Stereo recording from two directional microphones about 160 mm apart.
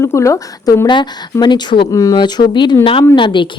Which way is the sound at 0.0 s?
20° left (ahead or behind).